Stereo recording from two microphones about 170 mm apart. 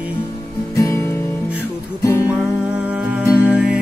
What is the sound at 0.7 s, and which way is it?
Music, 15° left (ahead or behind).